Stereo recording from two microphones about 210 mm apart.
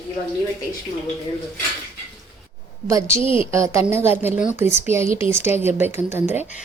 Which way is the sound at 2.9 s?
15° right (ahead or behind).